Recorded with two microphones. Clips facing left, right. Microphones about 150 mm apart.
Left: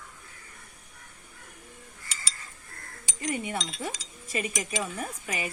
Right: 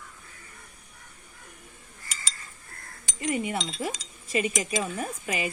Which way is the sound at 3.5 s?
30° right (ahead or behind).